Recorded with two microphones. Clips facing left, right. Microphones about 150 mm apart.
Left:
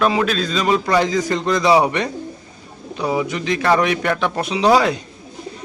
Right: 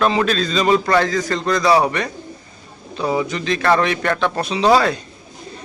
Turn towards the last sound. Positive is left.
turn(degrees=15)  # may be behind; listen again after turning